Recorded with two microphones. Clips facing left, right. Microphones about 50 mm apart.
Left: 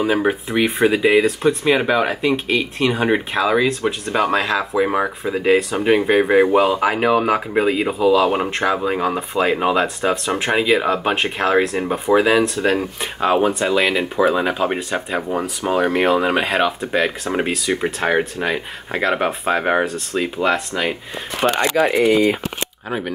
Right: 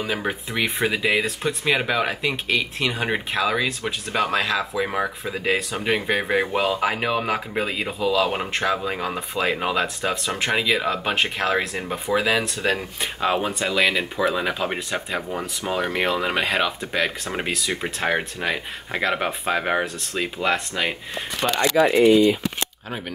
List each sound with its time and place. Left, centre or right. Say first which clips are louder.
0.0 s speech: left 8 dB; centre
21.9 s speech: right 1 dB; left
22.8 s speech: left 7 dB; centre